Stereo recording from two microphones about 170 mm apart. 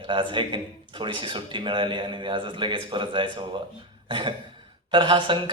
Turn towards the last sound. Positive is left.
turn(degrees=-30)  # may be behind; listen again after turning